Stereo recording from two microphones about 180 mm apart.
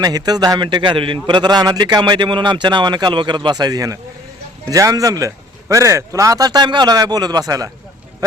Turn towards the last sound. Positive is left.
turn(degrees=-20)  # may be behind; listen again after turning